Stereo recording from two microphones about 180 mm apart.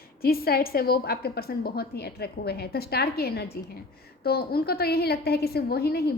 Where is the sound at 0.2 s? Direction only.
55° left (ahead or behind).